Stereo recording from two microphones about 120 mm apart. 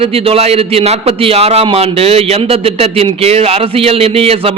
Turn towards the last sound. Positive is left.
turn(degrees=-55)  # may be behind; listen again after turning